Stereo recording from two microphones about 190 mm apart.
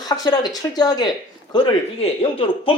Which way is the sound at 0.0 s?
20° left (ahead or behind).